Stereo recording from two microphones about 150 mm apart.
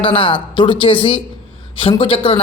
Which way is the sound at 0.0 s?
35° left (ahead or behind).